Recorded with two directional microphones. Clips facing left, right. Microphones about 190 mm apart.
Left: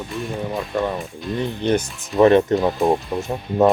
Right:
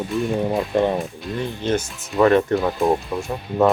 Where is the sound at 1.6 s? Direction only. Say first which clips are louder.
Left 3 dB; 15° left (ahead or behind).